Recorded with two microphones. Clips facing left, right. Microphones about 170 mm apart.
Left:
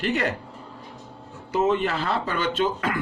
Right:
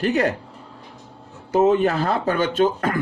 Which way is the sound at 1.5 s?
45° right (ahead or behind).